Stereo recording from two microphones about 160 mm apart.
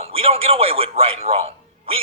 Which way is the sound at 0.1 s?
35° right (ahead or behind).